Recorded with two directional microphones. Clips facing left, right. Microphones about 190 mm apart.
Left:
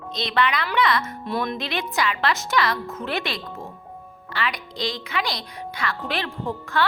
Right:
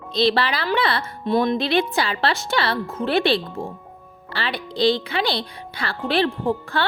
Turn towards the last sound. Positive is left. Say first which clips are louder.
# right 3 dB
turn(degrees=-30)  # may be behind; listen again after turning